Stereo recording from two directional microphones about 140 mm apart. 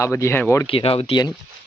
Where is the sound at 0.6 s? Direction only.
40° left (ahead or behind).